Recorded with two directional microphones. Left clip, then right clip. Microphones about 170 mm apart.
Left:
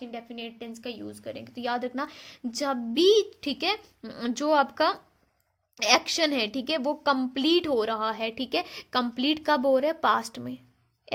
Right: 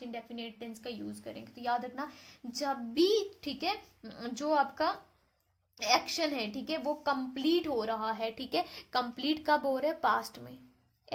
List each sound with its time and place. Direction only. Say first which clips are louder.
0.1 s a woman's voice: left 4 dB; 30° left (ahead or behind)